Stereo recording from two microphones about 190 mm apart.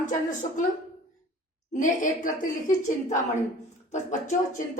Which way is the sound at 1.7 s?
40° left (ahead or behind).